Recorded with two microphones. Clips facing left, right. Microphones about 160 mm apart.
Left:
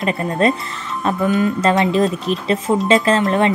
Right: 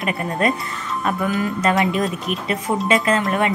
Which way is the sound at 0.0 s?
25° left (ahead or behind).